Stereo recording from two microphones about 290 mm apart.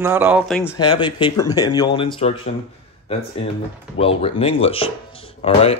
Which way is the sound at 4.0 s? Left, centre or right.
Centre.